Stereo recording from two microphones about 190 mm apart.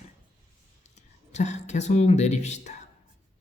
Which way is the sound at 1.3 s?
35° left (ahead or behind).